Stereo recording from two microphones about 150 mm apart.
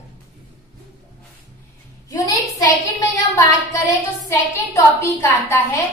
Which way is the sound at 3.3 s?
20° left (ahead or behind).